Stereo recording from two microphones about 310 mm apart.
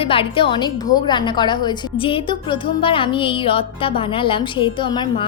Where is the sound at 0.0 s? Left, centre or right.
Centre.